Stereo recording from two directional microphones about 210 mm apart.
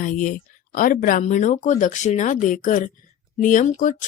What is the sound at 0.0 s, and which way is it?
Speech, 40° left (ahead or behind).